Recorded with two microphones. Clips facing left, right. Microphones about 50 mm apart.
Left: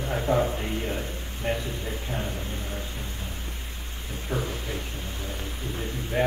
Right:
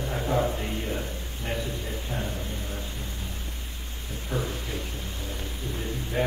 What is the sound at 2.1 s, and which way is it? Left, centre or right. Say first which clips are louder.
Speech: left 1 dB; left.